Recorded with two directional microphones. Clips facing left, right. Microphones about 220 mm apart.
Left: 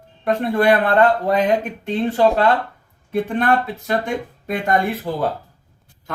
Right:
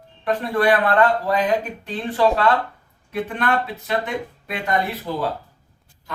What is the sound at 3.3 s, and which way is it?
Speech, 45° left (ahead or behind).